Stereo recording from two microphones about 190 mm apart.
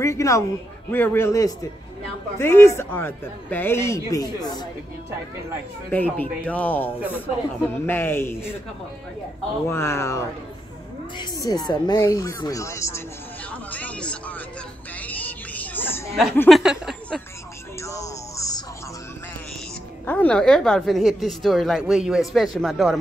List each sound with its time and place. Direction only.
0.0 s a man's voice: 15° left (ahead or behind)
5.9 s a man's voice: 15° left (ahead or behind)
9.7 s a man's voice: 15° left (ahead or behind)
13.5 s music: 5° left (ahead or behind)
15.0 s a sound: 10° left (ahead or behind)
16.3 s speech: centre (ahead or behind)
17.7 s music: 15° left (ahead or behind)
20.1 s a woman's voice: 5° left (ahead or behind)